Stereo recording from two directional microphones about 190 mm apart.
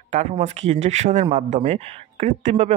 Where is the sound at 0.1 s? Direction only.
35° right (ahead or behind).